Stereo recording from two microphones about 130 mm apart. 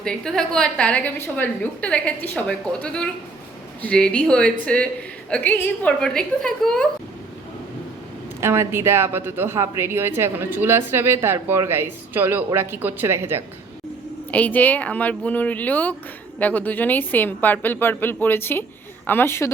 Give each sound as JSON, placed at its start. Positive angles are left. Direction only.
{"t": 0.0, "sound": "a woman's voice", "side_deg": 5}
{"t": 8.4, "sound": "a woman's voice", "side_deg": -20}
{"t": 14.3, "sound": "a woman's voice", "side_deg": 10}